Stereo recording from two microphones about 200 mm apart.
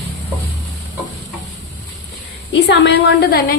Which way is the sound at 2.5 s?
60° left (ahead or behind).